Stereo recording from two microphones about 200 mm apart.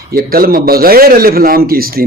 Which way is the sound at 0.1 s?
50° right (ahead or behind).